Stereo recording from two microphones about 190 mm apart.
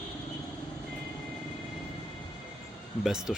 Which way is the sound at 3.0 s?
5° right (ahead or behind).